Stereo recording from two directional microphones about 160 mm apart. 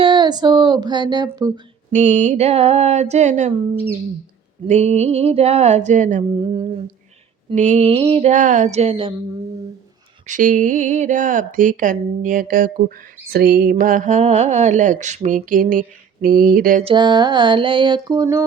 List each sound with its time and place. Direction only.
0.0 s a sound: 30° right (ahead or behind)
1.9 s speech: 45° right (ahead or behind)
4.6 s speech: 45° right (ahead or behind)
6.4 s humming: 35° right (ahead or behind)
7.5 s speech: 45° right (ahead or behind)
10.2 s speech: 55° right (ahead or behind)
13.2 s speech: 70° right (ahead or behind)
16.8 s a sound: 30° right (ahead or behind)